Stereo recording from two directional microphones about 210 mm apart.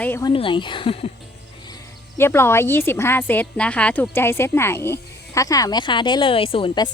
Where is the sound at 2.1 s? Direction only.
10° left (ahead or behind).